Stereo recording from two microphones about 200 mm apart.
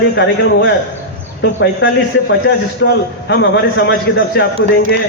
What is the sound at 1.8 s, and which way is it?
A man's voice, 60° left (ahead or behind).